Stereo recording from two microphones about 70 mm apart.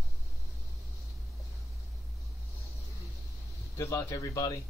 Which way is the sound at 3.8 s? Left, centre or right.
Left.